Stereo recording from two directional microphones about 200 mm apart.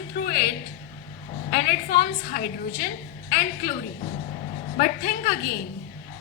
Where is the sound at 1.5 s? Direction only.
50° left (ahead or behind).